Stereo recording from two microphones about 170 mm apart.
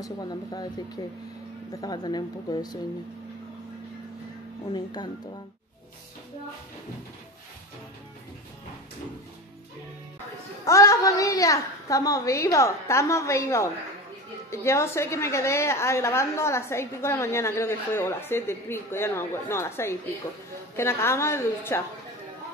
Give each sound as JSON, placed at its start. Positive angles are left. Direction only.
{"t": 0.0, "sound": "a woman's voice", "side_deg": 25}
{"t": 4.7, "sound": "a woman's voice", "side_deg": 25}
{"t": 10.6, "sound": "a woman's voice", "side_deg": 20}